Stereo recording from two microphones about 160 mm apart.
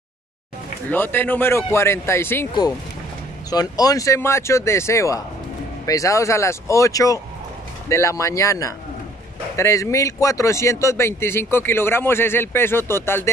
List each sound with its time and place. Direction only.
0.8 s speech: 15° left (ahead or behind)
3.4 s speech: 25° left (ahead or behind)